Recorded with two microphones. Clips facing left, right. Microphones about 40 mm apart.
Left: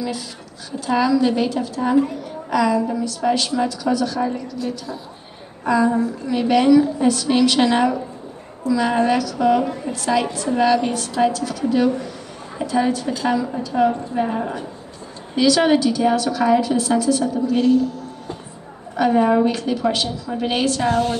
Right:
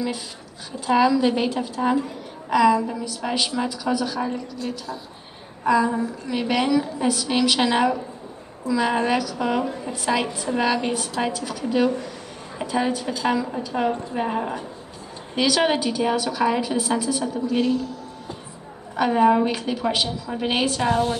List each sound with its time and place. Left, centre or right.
0.8 s a woman's voice: centre
18.9 s a woman's voice: centre